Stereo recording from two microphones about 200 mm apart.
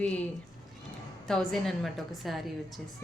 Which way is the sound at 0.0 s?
5° left (ahead or behind).